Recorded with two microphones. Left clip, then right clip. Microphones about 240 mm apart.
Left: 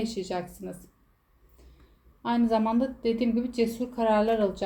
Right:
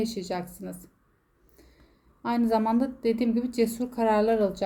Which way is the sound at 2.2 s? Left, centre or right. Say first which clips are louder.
Even; right.